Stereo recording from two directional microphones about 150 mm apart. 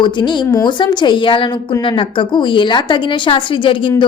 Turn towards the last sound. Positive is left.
turn(degrees=35)  # may be behind; listen again after turning